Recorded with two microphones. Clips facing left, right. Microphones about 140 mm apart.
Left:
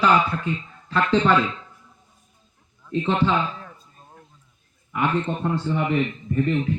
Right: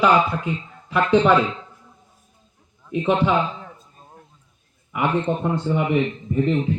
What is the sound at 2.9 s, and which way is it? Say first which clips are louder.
Speech: right 2 dB; 15° right (ahead or behind).